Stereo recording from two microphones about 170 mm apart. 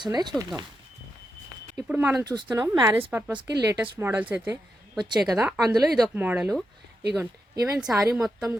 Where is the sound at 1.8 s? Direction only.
10° right (ahead or behind).